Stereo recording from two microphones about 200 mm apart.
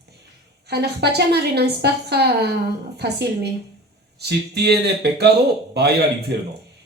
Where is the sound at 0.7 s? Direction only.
55° right (ahead or behind).